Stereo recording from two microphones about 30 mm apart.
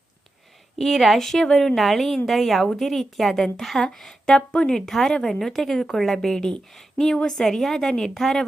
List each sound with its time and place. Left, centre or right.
0.8 s a woman's voice: centre
1.2 s a woman's voice: centre
1.7 s a woman's voice: centre
4.4 s speech: left
4.7 s a woman's voice: centre
5.0 s a woman's voice: left
5.5 s a woman's voice: centre